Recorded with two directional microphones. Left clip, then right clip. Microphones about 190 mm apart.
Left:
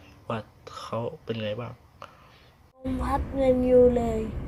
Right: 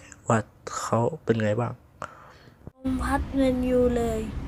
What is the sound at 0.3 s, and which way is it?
Speech, 30° right (ahead or behind).